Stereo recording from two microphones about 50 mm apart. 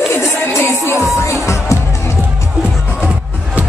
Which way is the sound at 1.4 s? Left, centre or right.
Left.